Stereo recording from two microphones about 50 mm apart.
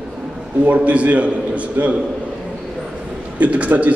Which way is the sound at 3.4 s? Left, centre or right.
Right.